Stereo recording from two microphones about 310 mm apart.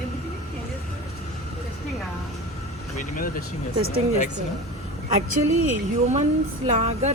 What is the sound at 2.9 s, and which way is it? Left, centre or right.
Speech, left.